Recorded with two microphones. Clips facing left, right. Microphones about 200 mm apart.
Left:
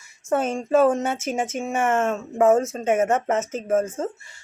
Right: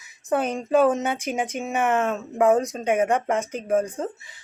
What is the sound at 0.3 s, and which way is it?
Speech, centre (ahead or behind).